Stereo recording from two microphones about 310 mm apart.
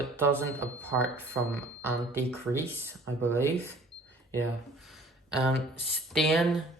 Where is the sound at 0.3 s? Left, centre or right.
Centre.